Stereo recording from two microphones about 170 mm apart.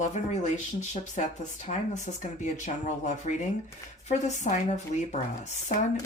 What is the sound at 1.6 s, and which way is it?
Speech, 45° left (ahead or behind).